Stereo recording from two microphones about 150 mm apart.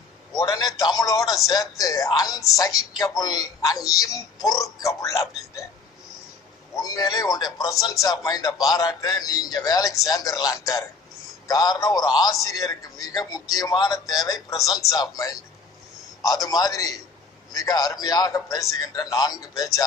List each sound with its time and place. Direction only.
0.3 s a man's voice: 25° left (ahead or behind)
6.8 s a man's voice: 25° left (ahead or behind)